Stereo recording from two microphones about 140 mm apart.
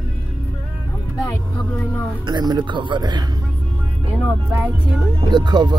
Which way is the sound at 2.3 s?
30° right (ahead or behind).